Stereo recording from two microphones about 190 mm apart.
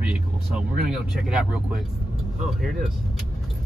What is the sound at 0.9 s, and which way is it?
Speech, 5° right (ahead or behind).